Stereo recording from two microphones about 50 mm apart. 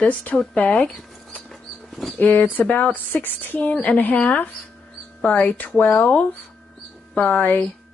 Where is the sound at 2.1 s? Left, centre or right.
Left.